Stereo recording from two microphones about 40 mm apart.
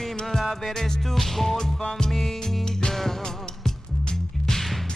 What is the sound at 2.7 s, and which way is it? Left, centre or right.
Music, centre.